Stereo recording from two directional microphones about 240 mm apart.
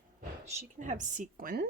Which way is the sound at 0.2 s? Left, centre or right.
Right.